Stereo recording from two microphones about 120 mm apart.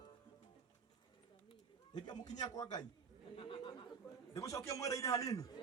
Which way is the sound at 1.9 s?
35° left (ahead or behind).